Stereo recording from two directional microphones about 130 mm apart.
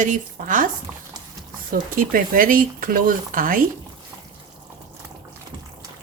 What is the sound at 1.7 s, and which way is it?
Speech, 90° right.